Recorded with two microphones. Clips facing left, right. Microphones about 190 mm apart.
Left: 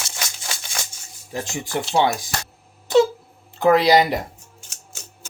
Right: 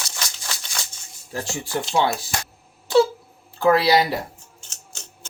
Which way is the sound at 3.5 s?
20° left (ahead or behind).